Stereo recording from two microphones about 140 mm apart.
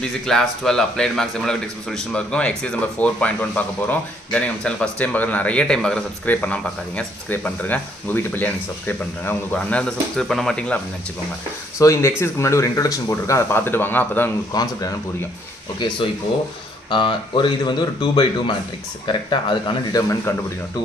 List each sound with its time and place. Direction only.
0.0 s a man's voice: 5° left (ahead or behind)
11.8 s speech: 20° left (ahead or behind)
14.5 s speech: 25° left (ahead or behind)
19.7 s speech: 25° left (ahead or behind)